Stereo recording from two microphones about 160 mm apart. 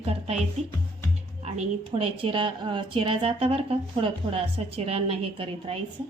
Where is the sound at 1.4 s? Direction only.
40° right (ahead or behind).